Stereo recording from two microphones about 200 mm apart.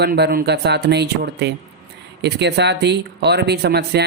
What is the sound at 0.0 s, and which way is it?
Speech, 50° right (ahead or behind).